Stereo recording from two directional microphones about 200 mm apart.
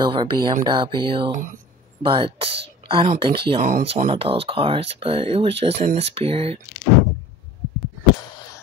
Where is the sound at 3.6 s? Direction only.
40° right (ahead or behind).